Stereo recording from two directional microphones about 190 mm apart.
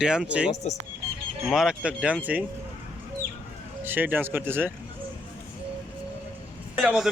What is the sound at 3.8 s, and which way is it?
Speech, 10° right (ahead or behind).